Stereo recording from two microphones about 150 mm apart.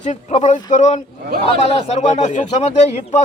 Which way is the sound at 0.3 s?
50° left (ahead or behind).